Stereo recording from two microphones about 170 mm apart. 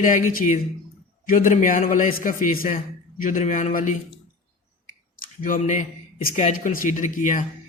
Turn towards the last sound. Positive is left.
turn(degrees=50)  # may be behind; listen again after turning